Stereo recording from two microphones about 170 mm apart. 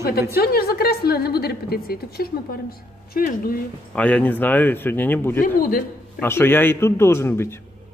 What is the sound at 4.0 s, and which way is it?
Speech, 5° left (ahead or behind).